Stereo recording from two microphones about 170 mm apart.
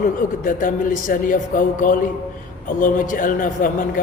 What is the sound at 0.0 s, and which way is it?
A man's voice, 55° left (ahead or behind).